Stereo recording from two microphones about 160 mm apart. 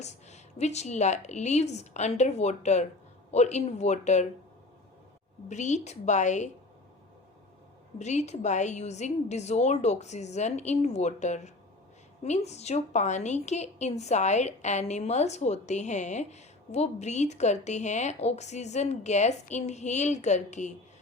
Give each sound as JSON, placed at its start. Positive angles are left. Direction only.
{"t": 0.0, "sound": "a woman's voice", "side_deg": 45}
{"t": 5.5, "sound": "a woman's voice", "side_deg": 45}
{"t": 7.9, "sound": "a woman's voice", "side_deg": 45}